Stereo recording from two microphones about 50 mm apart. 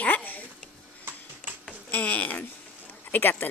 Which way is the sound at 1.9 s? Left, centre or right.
Left.